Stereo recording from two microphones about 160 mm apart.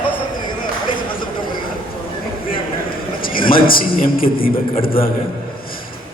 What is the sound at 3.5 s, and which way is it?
Speech, 65° left (ahead or behind).